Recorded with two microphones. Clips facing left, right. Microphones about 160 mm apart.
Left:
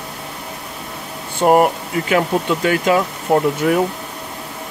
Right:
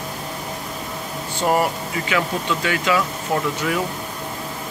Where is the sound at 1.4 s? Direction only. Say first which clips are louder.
Left 7 dB; 50° left (ahead or behind).